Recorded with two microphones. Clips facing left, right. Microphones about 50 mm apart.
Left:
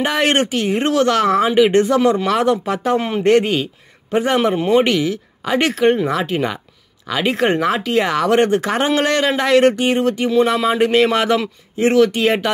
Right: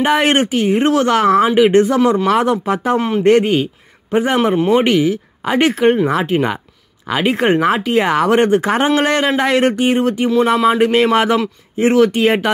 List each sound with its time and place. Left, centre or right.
0.0 s speech: centre
3.0 s speech: centre
3.3 s speech: centre